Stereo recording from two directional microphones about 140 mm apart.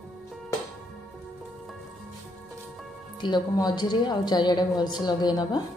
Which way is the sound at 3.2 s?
30° left (ahead or behind).